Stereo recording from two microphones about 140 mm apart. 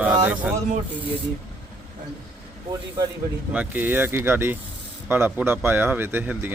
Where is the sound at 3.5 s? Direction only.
10° right (ahead or behind).